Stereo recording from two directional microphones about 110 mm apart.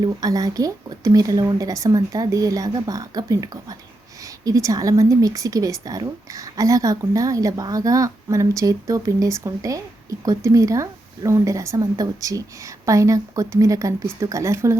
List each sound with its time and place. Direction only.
0.0 s a woman's voice: 35° right (ahead or behind)